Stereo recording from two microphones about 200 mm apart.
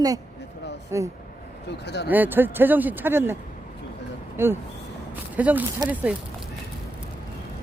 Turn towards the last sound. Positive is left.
turn(degrees=-20)  # may be behind; listen again after turning